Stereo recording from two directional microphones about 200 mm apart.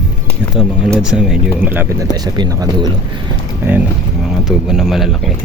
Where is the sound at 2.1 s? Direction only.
20° right (ahead or behind).